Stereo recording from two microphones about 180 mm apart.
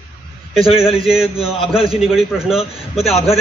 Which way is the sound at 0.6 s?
30° left (ahead or behind).